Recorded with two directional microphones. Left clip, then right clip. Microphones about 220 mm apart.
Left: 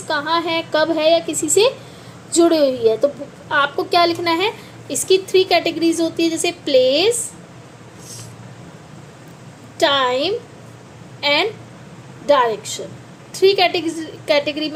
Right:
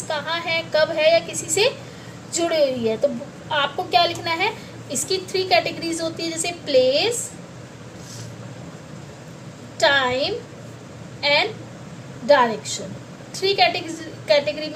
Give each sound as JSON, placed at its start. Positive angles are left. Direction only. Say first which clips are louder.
{"t": 0.1, "sound": "a woman's voice", "louder": "left 5 dB", "side_deg": 25}
{"t": 9.7, "sound": "a woman's voice", "louder": "left 2 dB", "side_deg": 30}